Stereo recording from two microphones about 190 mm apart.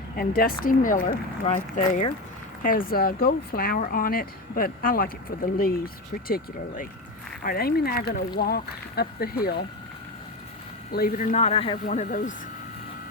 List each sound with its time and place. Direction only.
0.2 s speech: 50° left (ahead or behind)
10.9 s speech: 50° left (ahead or behind); by 11.8 s 25° left (ahead or behind)
11.9 s speech: 40° left (ahead or behind)